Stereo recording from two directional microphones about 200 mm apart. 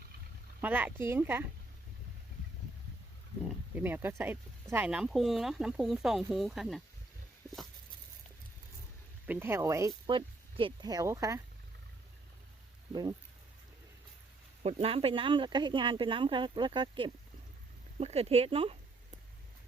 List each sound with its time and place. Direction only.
0.6 s speech: 10° right (ahead or behind)
3.8 s speech: 10° right (ahead or behind)
9.2 s speech: 10° right (ahead or behind)
12.9 s speech: 20° right (ahead or behind)
14.6 s speech: 30° right (ahead or behind)